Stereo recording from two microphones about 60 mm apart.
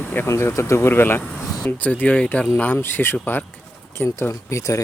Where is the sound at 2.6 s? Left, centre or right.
Left.